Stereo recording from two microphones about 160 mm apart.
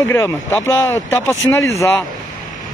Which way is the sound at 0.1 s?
15° left (ahead or behind).